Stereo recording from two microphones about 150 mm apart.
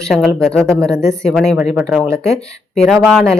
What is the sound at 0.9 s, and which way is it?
Speech, 20° right (ahead or behind).